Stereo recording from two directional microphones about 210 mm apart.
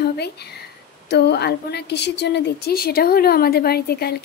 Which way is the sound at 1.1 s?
50° left (ahead or behind).